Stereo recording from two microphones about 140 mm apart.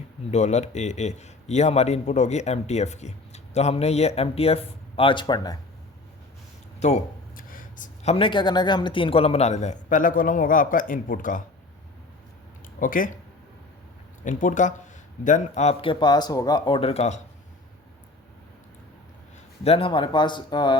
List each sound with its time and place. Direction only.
0.3 s a man's voice: 55° left (ahead or behind); by 5.5 s 30° left (ahead or behind)
6.7 s speech: 50° left (ahead or behind)
7.3 s a sound: 85° left
8.0 s a man's voice: 40° left (ahead or behind); by 11.4 s 70° left (ahead or behind)
12.8 s speech: 75° left (ahead or behind)
14.3 s a man's voice: 65° left (ahead or behind)
15.8 s speech: 35° left (ahead or behind)
19.6 s speech: 40° left (ahead or behind)